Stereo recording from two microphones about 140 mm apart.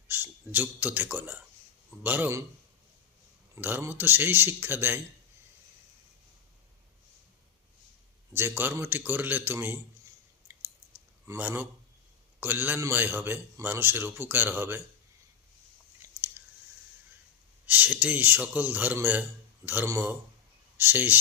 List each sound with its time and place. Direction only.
0.1 s a man's voice: 15° right (ahead or behind)
3.5 s a man's voice: 15° right (ahead or behind)
8.4 s a man's voice: 15° right (ahead or behind)
11.3 s a man's voice: 15° right (ahead or behind)
16.0 s chewing: 20° right (ahead or behind)
17.7 s a man's voice: 10° right (ahead or behind)